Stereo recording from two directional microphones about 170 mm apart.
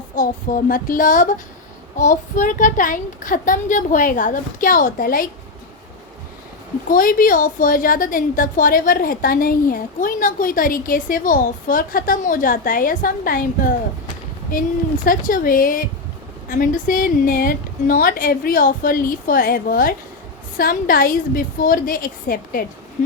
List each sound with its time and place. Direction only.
0.2 s a woman's voice: 50° left (ahead or behind)
6.8 s a woman's voice: 55° left (ahead or behind)
14.5 s a woman's voice: 55° left (ahead or behind)